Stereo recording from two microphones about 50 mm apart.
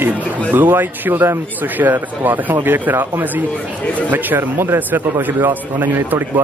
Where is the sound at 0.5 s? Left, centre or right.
Right.